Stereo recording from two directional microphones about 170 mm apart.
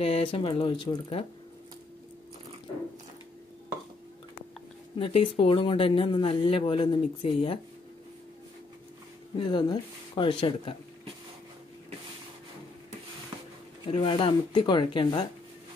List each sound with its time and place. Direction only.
0.0 s speech: 35° left (ahead or behind)
4.9 s speech: 35° left (ahead or behind)
9.5 s speech: 25° left (ahead or behind)
13.8 s speech: 30° left (ahead or behind)